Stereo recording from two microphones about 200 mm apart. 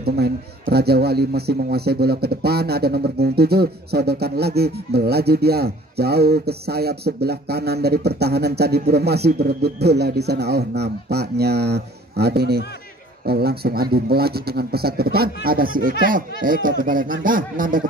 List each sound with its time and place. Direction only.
0.0 s a man's voice: 50° right (ahead or behind)